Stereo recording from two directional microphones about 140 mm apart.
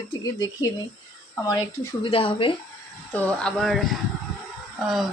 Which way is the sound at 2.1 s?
40° left (ahead or behind).